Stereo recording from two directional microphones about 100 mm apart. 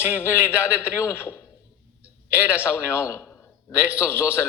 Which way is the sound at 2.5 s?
25° left (ahead or behind).